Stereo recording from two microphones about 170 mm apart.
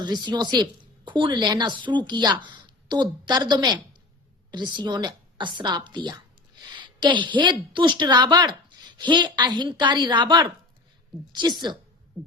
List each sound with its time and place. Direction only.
0.0 s a woman's voice: 25° right (ahead or behind)